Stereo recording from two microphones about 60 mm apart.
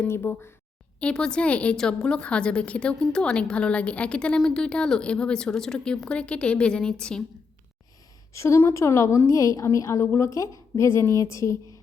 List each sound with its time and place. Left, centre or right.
0.1 s speech: left
0.9 s a woman's voice: centre
1.7 s a woman's voice: centre
8.3 s a woman's voice: left